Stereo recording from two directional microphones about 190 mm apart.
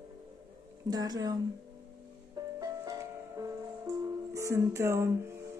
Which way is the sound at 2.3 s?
20° right (ahead or behind).